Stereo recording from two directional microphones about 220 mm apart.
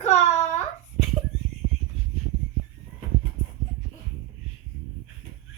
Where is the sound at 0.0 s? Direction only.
30° left (ahead or behind).